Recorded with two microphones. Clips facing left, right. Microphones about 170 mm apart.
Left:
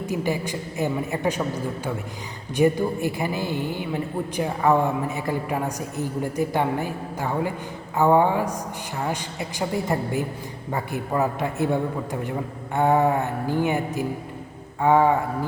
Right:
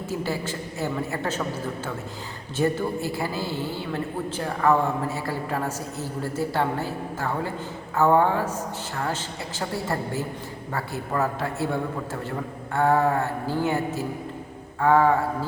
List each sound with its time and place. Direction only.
0.0 s a woman's voice: 15° left (ahead or behind)